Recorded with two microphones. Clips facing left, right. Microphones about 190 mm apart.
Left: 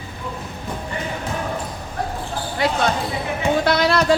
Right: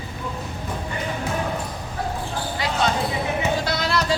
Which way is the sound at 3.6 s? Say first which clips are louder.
Left 6 dB; 60° left (ahead or behind).